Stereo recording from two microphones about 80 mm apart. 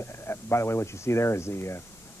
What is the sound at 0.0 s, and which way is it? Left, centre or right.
Speech, left.